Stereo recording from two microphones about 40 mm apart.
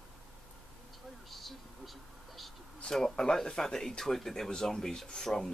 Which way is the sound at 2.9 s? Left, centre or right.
Centre.